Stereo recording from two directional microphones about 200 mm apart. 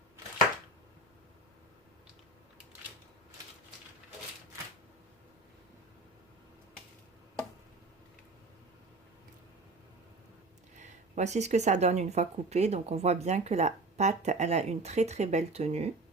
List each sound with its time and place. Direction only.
10.8 s speech: 35° right (ahead or behind)